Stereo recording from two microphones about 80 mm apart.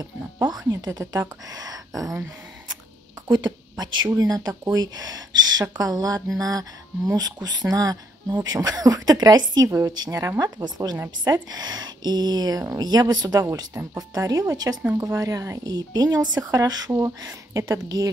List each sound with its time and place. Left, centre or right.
0.0 s speech: right
1.5 s a sound: right
3.3 s a woman's voice: right
4.2 s speech: right
9.7 s a woman's voice: right
9.9 s a woman's voice: right